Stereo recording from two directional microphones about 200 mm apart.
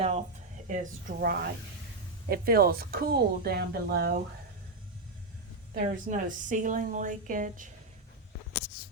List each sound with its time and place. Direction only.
0.0 s a sound: 35° right (ahead or behind)
0.7 s speech: 40° right (ahead or behind)
5.7 s a woman's voice: 40° right (ahead or behind)